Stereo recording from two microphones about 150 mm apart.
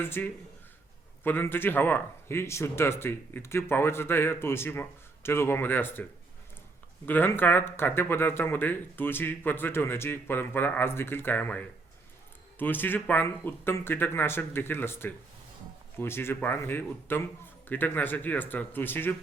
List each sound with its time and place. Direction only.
0.0 s speech: 15° left (ahead or behind)